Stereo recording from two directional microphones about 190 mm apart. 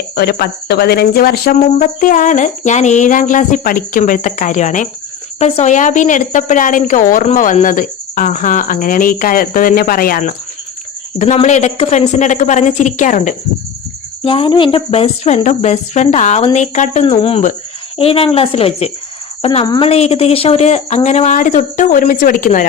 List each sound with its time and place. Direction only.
0.2 s a woman's voice: 55° left (ahead or behind)
14.3 s a woman's voice: 30° left (ahead or behind)
19.6 s a woman's voice: 20° left (ahead or behind)
19.9 s speech: 30° left (ahead or behind)